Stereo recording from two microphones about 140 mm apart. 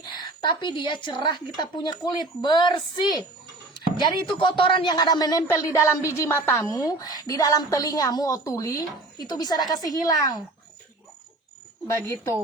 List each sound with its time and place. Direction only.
0.0 s a woman's voice: 30° left (ahead or behind)